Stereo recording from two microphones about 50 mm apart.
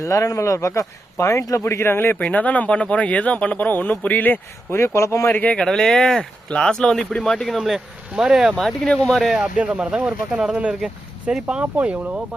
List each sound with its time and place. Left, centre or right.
0.0 s speech: left
1.6 s speech: left
2.3 s speech: left
4.9 s speech: left
5.3 s speech: left
5.5 s speech: centre
8.1 s speech: centre
8.5 s speech: centre
9.4 s speech: right
11.6 s speech: right